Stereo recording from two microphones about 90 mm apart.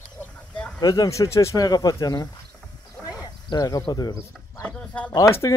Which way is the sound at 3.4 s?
45° left (ahead or behind).